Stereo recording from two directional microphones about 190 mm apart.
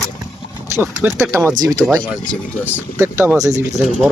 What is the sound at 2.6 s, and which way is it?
Speech, 10° right (ahead or behind).